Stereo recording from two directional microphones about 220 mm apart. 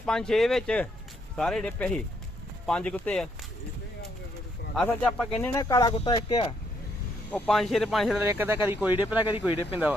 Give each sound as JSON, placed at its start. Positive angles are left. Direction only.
{"t": 0.0, "sound": "speech", "side_deg": 5}
{"t": 4.7, "sound": "speech", "side_deg": 5}
{"t": 5.5, "sound": "speech", "side_deg": 15}
{"t": 7.3, "sound": "speech", "side_deg": 5}